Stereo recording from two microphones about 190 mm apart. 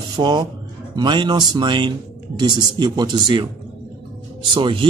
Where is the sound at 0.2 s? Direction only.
25° right (ahead or behind).